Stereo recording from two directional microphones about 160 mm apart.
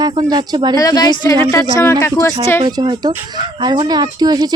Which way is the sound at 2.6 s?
25° right (ahead or behind).